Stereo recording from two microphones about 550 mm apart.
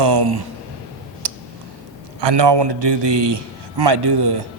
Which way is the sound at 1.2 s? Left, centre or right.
Right.